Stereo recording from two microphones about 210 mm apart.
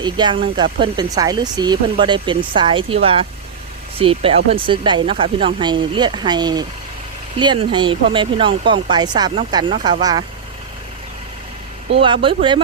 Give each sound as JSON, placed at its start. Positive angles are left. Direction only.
{"t": 0.0, "sound": "speech", "side_deg": -20}
{"t": 11.9, "sound": "speech", "side_deg": -25}